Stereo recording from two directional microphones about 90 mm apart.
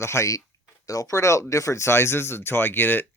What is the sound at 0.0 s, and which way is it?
Speech, 30° left (ahead or behind).